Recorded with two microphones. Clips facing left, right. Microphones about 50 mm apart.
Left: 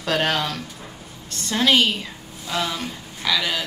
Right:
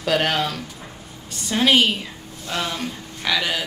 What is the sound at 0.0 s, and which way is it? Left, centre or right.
Speech, centre.